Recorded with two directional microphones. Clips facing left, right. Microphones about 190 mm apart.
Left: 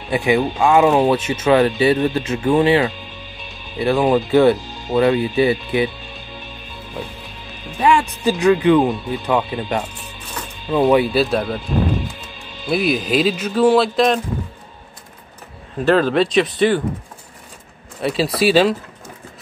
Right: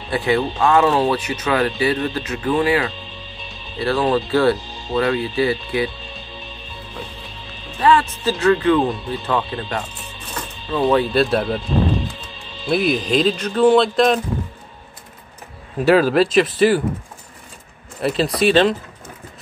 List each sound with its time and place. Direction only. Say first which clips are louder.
0.1 s speech: left 2 dB; 15° left (ahead or behind)
7.8 s speech: even; 15° left (ahead or behind)
12.6 s speech: even; centre (ahead or behind)
15.8 s speech: right 1 dB; 5° right (ahead or behind)
18.0 s speech: even; 5° left (ahead or behind)